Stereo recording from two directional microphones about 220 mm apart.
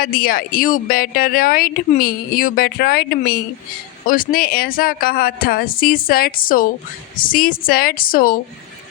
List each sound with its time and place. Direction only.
0.0 s a woman's voice: 40° left (ahead or behind)